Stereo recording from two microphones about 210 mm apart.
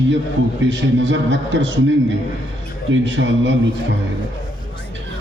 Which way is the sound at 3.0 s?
60° right (ahead or behind).